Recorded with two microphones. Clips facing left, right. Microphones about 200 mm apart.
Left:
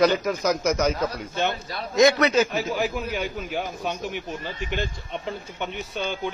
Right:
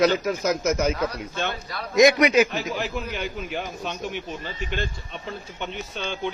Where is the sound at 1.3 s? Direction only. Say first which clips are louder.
Left 3 dB; 20° left (ahead or behind).